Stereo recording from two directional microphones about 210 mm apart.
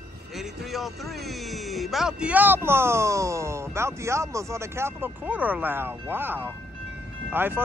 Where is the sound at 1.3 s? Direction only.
Centre (ahead or behind).